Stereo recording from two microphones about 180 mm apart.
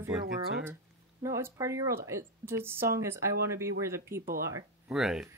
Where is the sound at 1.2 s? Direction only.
15° right (ahead or behind).